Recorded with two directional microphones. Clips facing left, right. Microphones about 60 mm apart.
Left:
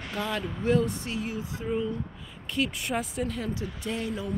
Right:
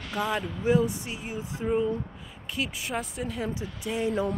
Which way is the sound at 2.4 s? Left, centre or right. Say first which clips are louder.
Left 3 dB; centre.